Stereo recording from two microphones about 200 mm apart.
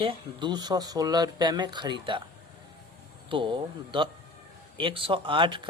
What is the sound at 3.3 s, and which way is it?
Speech, 25° right (ahead or behind).